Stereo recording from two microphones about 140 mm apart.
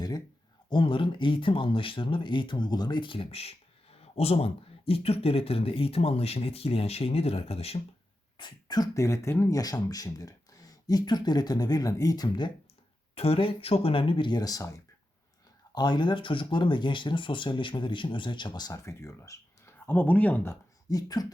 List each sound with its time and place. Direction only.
0.7 s speech: 35° left (ahead or behind)
8.4 s speech: 30° left (ahead or behind)
13.1 s speech: 45° left (ahead or behind); by 14.7 s 25° left (ahead or behind)
15.7 s speech: 30° left (ahead or behind)